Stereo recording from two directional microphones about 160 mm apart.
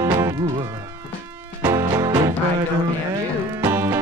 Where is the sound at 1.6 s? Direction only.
20° right (ahead or behind).